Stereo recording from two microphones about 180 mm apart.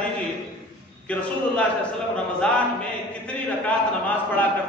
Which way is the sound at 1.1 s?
5° left (ahead or behind).